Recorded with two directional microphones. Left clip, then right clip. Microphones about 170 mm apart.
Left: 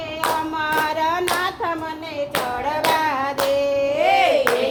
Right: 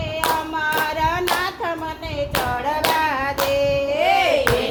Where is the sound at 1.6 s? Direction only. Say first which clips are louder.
Left 1 dB; 15° left (ahead or behind).